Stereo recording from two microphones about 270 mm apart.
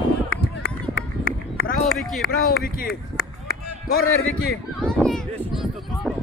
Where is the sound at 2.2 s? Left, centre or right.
Left.